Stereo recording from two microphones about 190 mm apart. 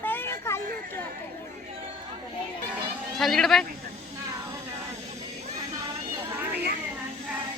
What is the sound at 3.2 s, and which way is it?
Speech, centre (ahead or behind).